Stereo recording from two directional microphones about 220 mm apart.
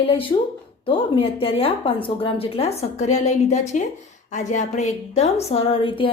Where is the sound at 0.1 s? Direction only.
25° left (ahead or behind).